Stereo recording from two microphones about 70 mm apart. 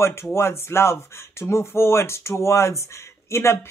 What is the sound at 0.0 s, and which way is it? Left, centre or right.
Speech, left.